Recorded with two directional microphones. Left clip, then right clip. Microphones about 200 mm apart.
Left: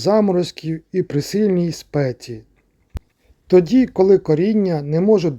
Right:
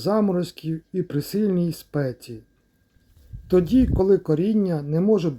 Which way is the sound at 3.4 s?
25° left (ahead or behind).